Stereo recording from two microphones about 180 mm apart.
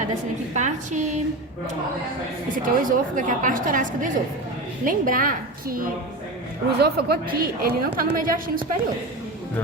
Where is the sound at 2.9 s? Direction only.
45° right (ahead or behind).